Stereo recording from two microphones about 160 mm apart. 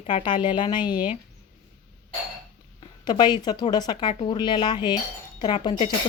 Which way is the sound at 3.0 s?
25° left (ahead or behind).